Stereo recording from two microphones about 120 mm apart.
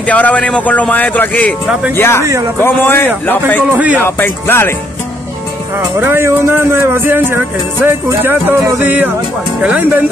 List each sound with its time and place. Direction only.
0.0 s speech: 10° left (ahead or behind)
3.7 s speech: 10° right (ahead or behind)
4.0 s speech: 15° left (ahead or behind)
5.9 s music: 20° right (ahead or behind)
9.6 s speech: 10° right (ahead or behind)